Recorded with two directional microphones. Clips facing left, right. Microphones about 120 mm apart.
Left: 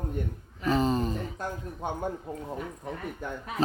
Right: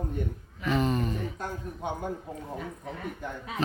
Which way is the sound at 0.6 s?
35° left (ahead or behind).